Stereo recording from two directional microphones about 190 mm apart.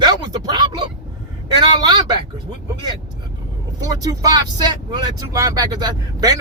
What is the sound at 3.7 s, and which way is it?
Speech, 20° right (ahead or behind).